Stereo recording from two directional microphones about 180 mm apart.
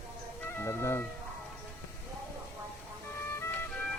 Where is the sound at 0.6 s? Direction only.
15° left (ahead or behind).